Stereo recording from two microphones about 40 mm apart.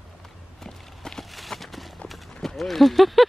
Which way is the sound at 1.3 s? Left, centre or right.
Centre.